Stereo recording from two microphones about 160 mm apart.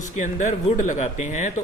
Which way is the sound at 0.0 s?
50° left (ahead or behind).